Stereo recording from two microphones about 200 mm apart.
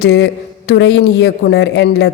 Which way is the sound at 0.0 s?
55° left (ahead or behind).